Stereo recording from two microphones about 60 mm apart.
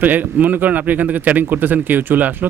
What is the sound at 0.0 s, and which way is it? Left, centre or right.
Speech, right.